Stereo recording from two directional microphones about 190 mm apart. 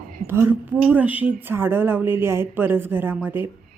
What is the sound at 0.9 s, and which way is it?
A woman's voice, 10° right (ahead or behind).